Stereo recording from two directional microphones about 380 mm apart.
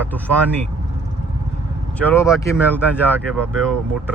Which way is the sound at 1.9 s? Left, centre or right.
Centre.